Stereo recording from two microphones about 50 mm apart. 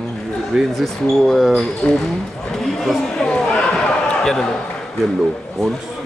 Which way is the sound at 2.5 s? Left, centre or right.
Centre.